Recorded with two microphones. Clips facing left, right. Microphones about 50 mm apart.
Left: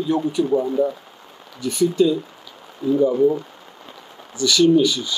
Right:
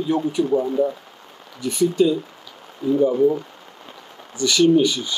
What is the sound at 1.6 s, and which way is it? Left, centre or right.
Speech, right.